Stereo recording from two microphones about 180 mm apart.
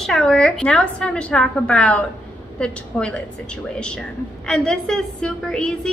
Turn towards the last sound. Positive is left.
turn(degrees=5)  # may be behind; listen again after turning